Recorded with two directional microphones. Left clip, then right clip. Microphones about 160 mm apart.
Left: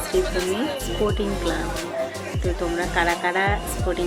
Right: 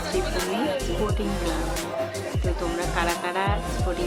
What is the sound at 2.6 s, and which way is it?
Speech, centre (ahead or behind).